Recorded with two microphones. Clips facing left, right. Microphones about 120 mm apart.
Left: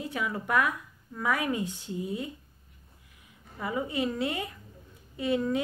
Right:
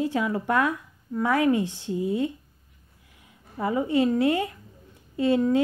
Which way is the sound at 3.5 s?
25° right (ahead or behind).